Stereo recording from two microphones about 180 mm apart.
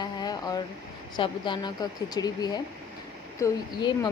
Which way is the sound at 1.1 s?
25° left (ahead or behind).